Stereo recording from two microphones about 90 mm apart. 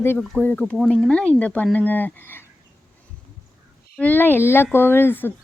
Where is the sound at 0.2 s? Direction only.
15° left (ahead or behind).